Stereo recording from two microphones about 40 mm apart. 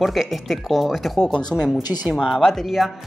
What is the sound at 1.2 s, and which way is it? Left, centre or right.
Speech, centre.